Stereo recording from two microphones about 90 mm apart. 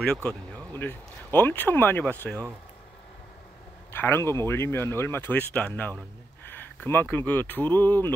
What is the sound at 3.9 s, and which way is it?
Speech, 25° left (ahead or behind).